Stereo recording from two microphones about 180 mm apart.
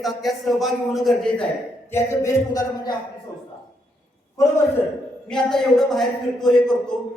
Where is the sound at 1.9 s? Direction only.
20° left (ahead or behind).